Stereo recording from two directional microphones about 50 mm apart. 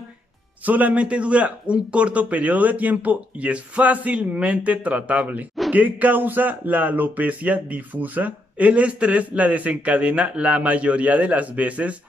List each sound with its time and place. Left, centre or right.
0.7 s a man's voice: right